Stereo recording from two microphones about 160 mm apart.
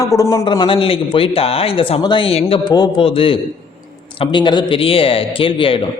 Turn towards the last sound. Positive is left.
turn(degrees=35)  # may be behind; listen again after turning